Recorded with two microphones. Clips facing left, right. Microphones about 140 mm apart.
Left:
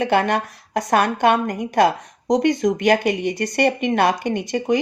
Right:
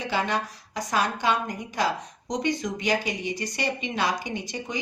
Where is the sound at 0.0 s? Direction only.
60° left (ahead or behind).